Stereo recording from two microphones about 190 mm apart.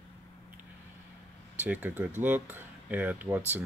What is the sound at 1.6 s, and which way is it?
Speech, 10° right (ahead or behind).